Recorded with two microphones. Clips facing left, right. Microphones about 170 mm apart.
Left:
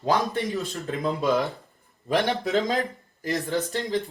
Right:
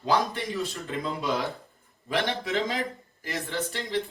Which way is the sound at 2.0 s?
40° left (ahead or behind).